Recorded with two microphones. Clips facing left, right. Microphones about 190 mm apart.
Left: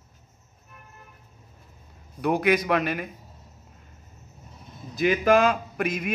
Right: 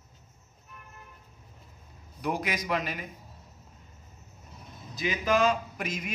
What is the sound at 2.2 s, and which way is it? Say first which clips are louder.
Speech: left 9 dB; 60° left (ahead or behind).